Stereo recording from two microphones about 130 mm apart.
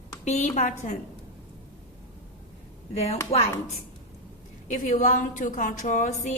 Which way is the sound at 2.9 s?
55° left (ahead or behind).